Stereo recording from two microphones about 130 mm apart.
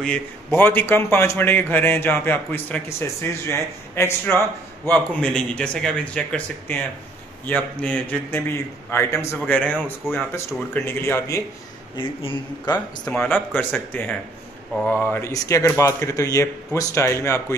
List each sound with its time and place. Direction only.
0.5 s a man's voice: 15° left (ahead or behind)
7.8 s a man's voice: 10° left (ahead or behind)
12.0 s speech: 45° left (ahead or behind)
12.6 s a man's voice: 10° left (ahead or behind)